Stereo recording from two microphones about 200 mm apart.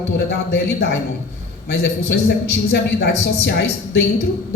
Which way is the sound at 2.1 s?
55° left (ahead or behind).